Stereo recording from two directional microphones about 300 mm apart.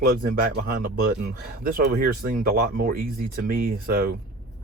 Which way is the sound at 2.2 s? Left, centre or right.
Right.